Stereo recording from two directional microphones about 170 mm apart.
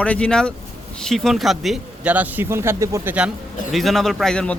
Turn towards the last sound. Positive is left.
turn(degrees=5)  # may be behind; listen again after turning